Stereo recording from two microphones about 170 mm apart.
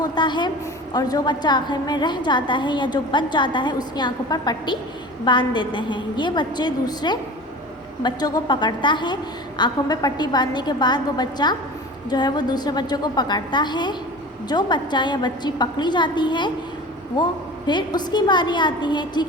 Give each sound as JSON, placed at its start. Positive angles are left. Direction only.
{"t": 0.0, "sound": "a woman's voice", "side_deg": 25}
{"t": 17.7, "sound": "a woman's voice", "side_deg": 25}